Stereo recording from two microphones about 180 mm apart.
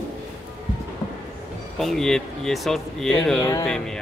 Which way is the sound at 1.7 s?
Centre (ahead or behind).